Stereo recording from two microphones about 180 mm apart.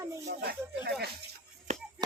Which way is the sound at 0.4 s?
60° right (ahead or behind).